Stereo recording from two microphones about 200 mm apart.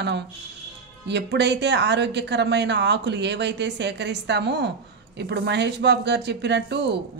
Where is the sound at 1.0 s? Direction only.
60° right (ahead or behind).